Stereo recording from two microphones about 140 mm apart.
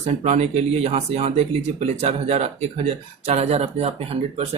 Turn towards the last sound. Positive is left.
turn(degrees=-45)  # may be behind; listen again after turning